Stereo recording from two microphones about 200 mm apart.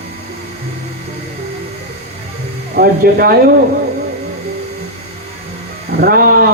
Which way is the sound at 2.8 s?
50° right (ahead or behind).